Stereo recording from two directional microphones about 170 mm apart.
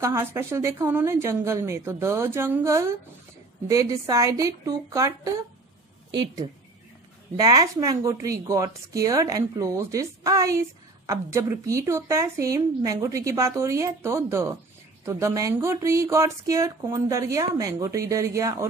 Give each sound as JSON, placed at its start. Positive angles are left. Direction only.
{"t": 0.0, "sound": "a woman's voice", "side_deg": -15}
{"t": 7.3, "sound": "a woman's voice", "side_deg": -20}